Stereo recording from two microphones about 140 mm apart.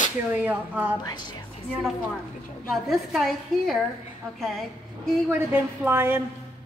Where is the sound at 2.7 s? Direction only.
Centre (ahead or behind).